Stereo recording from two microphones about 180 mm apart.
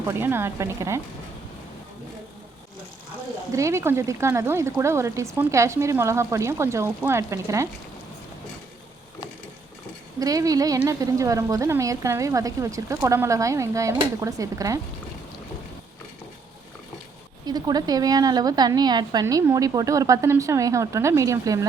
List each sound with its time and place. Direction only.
0.1 s speech: 15° right (ahead or behind)
3.5 s speech: 15° right (ahead or behind)
10.2 s a woman's voice: 20° right (ahead or behind)
17.4 s a woman's voice: 20° right (ahead or behind)